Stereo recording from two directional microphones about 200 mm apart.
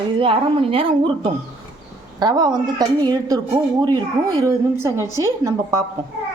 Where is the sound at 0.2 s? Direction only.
30° right (ahead or behind).